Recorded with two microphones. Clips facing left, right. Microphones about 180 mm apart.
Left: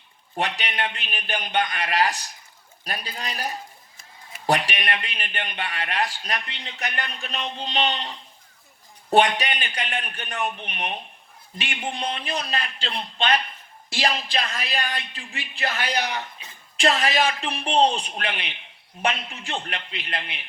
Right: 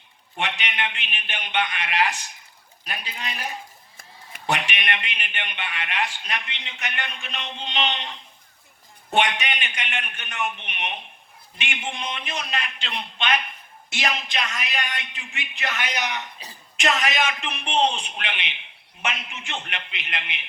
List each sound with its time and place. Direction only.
0.3 s a man's voice: 35° left (ahead or behind)